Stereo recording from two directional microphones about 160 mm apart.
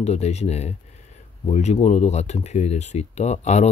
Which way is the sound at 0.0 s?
45° left (ahead or behind).